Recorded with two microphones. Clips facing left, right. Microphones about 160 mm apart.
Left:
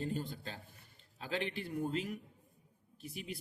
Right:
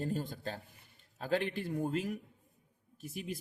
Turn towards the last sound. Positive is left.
turn(degrees=-45)  # may be behind; listen again after turning